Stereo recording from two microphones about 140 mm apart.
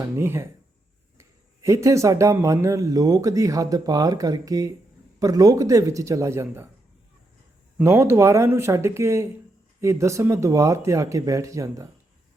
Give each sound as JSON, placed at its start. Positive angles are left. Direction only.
{"t": 0.2, "sound": "speech", "side_deg": -20}
{"t": 7.8, "sound": "speech", "side_deg": -20}